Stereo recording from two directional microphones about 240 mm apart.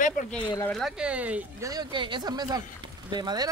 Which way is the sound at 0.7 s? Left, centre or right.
Centre.